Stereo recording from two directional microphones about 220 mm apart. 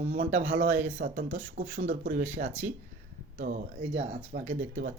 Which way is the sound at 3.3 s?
35° right (ahead or behind).